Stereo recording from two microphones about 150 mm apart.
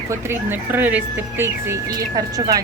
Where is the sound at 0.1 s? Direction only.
15° right (ahead or behind).